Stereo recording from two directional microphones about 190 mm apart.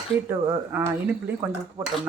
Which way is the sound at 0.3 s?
10° right (ahead or behind).